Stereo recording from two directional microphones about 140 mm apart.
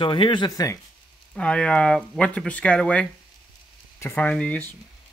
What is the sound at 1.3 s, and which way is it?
Speech, 5° left (ahead or behind).